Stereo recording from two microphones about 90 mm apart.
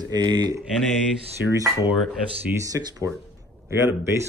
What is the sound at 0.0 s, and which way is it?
Speech, 55° right (ahead or behind).